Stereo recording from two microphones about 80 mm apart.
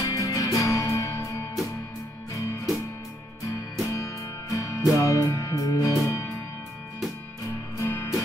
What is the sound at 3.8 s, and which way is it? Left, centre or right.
Music, left.